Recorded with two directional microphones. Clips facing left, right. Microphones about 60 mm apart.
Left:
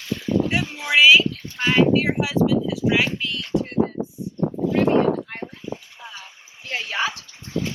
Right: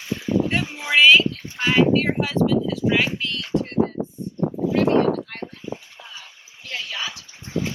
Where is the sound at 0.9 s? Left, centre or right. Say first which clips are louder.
Even; centre.